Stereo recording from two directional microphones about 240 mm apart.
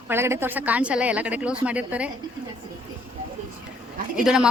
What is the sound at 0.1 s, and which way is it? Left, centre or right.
Speech, centre.